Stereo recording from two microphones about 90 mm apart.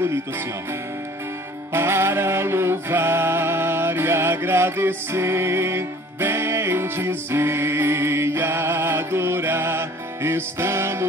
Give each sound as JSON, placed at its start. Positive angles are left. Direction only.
{"t": 1.7, "sound": "music", "side_deg": -25}